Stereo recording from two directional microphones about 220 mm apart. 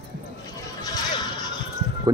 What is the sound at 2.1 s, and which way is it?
Speech, 15° right (ahead or behind).